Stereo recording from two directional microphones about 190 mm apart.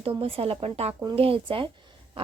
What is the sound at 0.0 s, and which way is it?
Speech, 30° right (ahead or behind).